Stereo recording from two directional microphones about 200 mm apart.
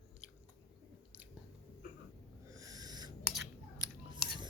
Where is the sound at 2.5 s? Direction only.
15° right (ahead or behind).